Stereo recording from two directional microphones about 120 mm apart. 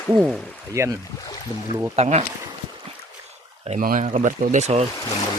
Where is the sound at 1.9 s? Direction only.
65° right (ahead or behind).